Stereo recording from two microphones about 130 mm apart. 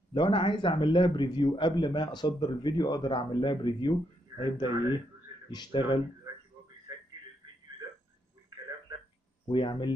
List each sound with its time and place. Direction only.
0.1 s a man's voice: 40° left (ahead or behind)
9.5 s a man's voice: 40° left (ahead or behind)